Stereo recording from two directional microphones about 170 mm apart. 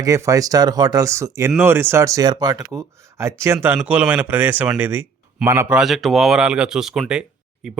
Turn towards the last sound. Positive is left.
turn(degrees=-5)  # may be behind; listen again after turning